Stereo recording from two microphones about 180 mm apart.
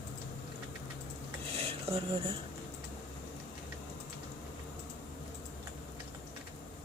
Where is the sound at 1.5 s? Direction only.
35° right (ahead or behind).